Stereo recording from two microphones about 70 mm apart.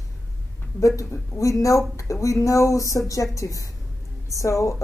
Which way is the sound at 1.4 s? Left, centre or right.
Left.